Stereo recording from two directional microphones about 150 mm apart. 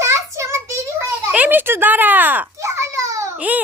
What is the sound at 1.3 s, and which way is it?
Children playing, 10° right (ahead or behind).